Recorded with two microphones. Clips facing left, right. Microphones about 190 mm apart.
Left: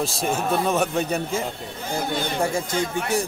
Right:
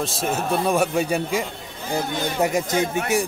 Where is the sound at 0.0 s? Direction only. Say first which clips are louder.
Even; centre (ahead or behind).